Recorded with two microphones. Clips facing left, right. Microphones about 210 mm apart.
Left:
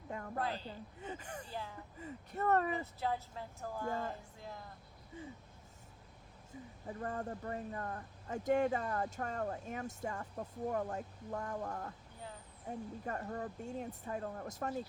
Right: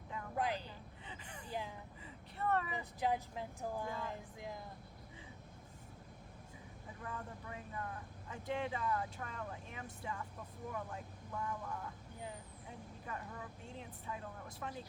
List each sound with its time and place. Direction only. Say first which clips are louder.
0.3 s speech: right 2 dB; 15° right (ahead or behind)
1.0 s speech: left 9 dB; 45° left (ahead or behind)
1.5 s speech: right 4 dB; 15° right (ahead or behind)
2.0 s speech: left 6 dB; 45° left (ahead or behind)
2.7 s speech: even; 15° right (ahead or behind)
7.0 s speech: left 7 dB; 45° left (ahead or behind)